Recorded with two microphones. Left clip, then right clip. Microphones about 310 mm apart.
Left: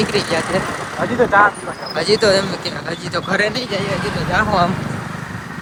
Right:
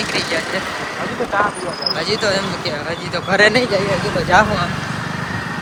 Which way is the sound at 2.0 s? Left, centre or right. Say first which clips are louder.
Left 6 dB; left.